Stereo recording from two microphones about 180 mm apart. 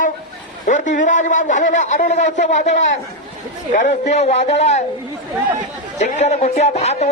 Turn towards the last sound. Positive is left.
turn(degrees=40)  # may be behind; listen again after turning